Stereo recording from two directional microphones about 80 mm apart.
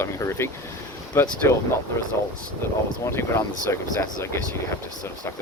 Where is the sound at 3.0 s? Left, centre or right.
Left.